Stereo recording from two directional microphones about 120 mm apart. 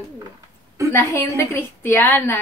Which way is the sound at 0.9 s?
20° left (ahead or behind).